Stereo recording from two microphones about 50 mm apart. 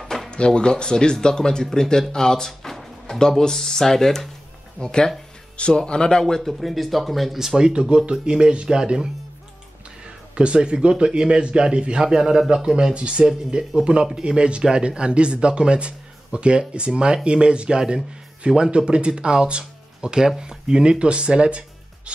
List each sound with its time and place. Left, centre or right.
0.0 s a sound: centre
0.5 s speech: centre
6.6 s speech: centre
7.3 s speech: centre
10.3 s speech: right